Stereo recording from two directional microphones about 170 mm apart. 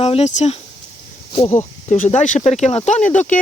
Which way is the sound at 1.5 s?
45° left (ahead or behind).